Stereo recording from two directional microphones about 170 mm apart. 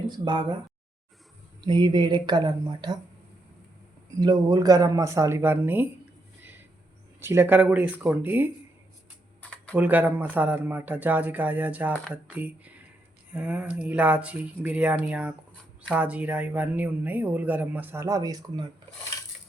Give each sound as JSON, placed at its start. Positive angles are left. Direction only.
{"t": 1.6, "sound": "speech", "side_deg": -25}
{"t": 4.2, "sound": "speech", "side_deg": -20}
{"t": 7.2, "sound": "speech", "side_deg": -15}
{"t": 9.4, "sound": "typing", "side_deg": 5}
{"t": 9.7, "sound": "speech", "side_deg": -10}